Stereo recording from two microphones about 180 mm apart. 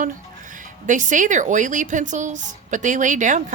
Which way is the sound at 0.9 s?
45° right (ahead or behind).